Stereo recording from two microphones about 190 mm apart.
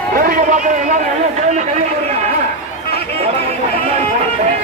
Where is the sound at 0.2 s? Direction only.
45° right (ahead or behind).